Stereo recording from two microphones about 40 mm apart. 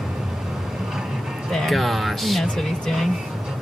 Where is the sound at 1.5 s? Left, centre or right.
Centre.